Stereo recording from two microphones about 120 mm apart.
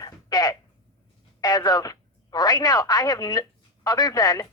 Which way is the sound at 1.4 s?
30° left (ahead or behind).